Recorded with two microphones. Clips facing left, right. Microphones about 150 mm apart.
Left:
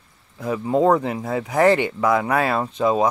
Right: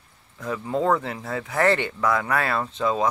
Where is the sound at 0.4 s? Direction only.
20° left (ahead or behind).